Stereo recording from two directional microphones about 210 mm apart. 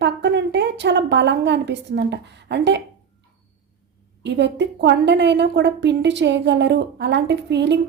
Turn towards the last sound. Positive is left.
turn(degrees=-55)  # may be behind; listen again after turning